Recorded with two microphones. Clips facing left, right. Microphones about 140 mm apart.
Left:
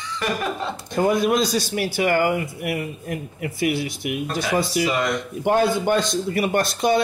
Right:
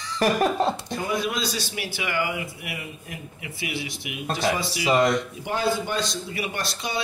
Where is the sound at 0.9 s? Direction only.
50° left (ahead or behind).